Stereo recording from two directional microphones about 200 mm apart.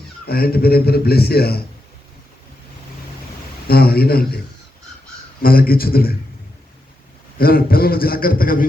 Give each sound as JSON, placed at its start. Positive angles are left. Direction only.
{"t": 0.3, "sound": "a man's voice", "side_deg": 50}
{"t": 3.7, "sound": "a man's voice", "side_deg": 50}
{"t": 5.4, "sound": "a man's voice", "side_deg": 45}
{"t": 7.3, "sound": "a man's voice", "side_deg": 45}